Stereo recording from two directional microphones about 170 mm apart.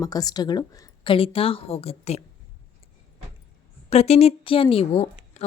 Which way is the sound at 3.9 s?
40° left (ahead or behind).